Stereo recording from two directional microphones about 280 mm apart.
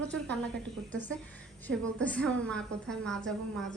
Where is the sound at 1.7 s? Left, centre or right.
Centre.